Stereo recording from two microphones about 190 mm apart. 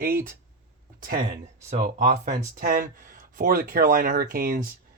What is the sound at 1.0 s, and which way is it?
Speech, 50° right (ahead or behind).